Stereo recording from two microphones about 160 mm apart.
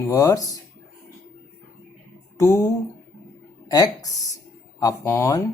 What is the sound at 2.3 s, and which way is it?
Speech, 20° left (ahead or behind).